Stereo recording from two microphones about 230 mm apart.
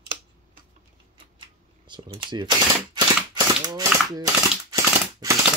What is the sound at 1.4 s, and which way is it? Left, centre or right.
Camera, right.